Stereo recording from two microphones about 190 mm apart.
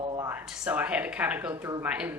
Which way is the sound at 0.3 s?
10° right (ahead or behind).